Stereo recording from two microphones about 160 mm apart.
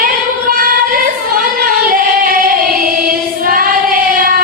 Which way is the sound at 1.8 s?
60° right (ahead or behind).